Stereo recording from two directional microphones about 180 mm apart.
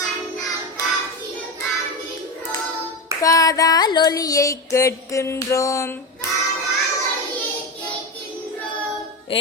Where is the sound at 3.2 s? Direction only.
20° left (ahead or behind).